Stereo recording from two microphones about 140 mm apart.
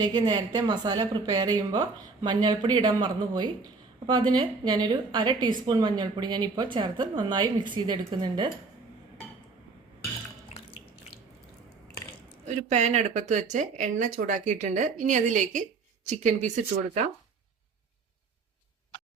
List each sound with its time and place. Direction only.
0.0 s a woman's voice: 30° right (ahead or behind)
12.6 s speech: 55° right (ahead or behind)